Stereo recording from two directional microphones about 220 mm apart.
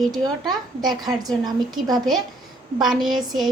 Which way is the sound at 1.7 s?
20° right (ahead or behind).